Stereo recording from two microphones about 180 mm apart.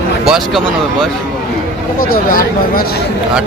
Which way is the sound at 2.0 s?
55° left (ahead or behind).